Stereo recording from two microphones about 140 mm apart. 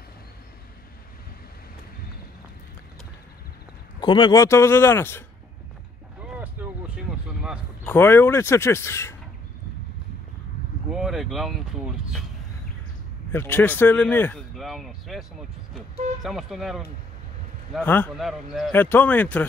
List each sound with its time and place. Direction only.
4.0 s a man's voice: 35° left (ahead or behind); by 5.2 s 15° left (ahead or behind)
6.1 s vehicle: 10° right (ahead or behind)
7.8 s speech: 15° left (ahead or behind)
10.9 s speech: 5° right (ahead or behind)
13.3 s speech: 15° left (ahead or behind)
14.5 s speech: centre (ahead or behind)
17.8 s speech: 15° left (ahead or behind)
18.1 s speech: centre (ahead or behind)
18.7 s speech: 15° left (ahead or behind)